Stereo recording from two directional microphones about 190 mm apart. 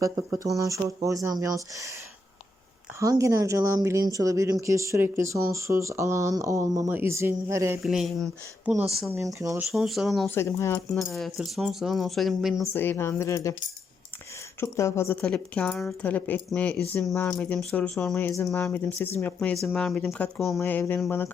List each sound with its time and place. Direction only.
0.0 s speech: 15° right (ahead or behind)
3.0 s speech: 15° right (ahead or behind)
7.8 s speech: centre (ahead or behind)
9.0 s speech: 15° right (ahead or behind)
9.7 s speech: centre (ahead or behind)
10.2 s a woman's voice: 15° left (ahead or behind)
10.8 s speech: centre (ahead or behind)
12.7 s a woman's voice: 10° left (ahead or behind)
14.6 s a woman's voice: 15° left (ahead or behind)